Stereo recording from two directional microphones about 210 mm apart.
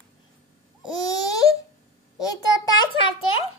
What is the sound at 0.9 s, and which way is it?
Baby cry, 20° left (ahead or behind).